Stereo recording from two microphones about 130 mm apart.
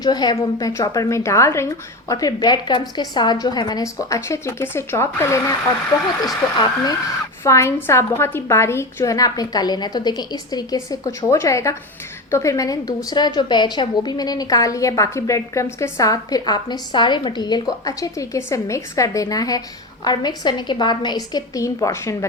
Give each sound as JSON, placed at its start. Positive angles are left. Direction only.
{"t": 0.0, "sound": "a woman's voice", "side_deg": 30}